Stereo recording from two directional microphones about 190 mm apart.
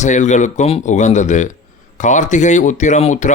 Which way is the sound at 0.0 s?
40° left (ahead or behind).